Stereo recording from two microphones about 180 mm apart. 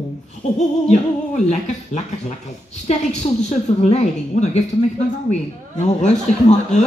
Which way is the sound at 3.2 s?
35° left (ahead or behind).